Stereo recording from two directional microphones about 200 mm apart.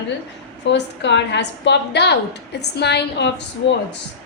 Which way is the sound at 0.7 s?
60° left (ahead or behind).